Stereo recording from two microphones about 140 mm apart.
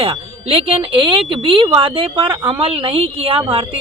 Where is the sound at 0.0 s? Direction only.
45° right (ahead or behind).